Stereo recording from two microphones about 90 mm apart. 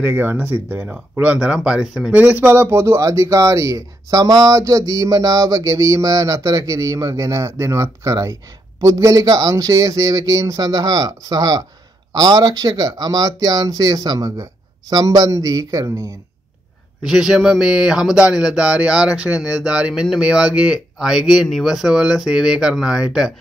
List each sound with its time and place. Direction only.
0.0 s speech: 20° right (ahead or behind); by 2.1 s 5° right (ahead or behind)
2.4 s speech: 25° right (ahead or behind)
17.0 s speech: 5° right (ahead or behind)